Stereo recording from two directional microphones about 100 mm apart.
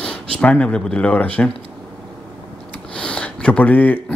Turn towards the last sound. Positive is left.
turn(degrees=15)  # may be behind; listen again after turning